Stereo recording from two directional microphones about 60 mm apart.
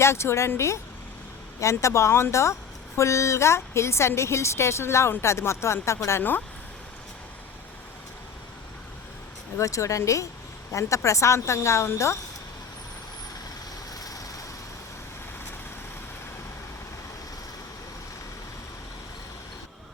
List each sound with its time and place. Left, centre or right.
0.0 s speech: left
9.6 s speech: left
13.9 s vehicle: left